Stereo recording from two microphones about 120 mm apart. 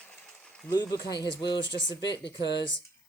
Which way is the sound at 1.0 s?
35° left (ahead or behind).